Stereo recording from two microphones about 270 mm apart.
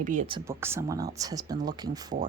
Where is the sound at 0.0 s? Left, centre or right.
Right.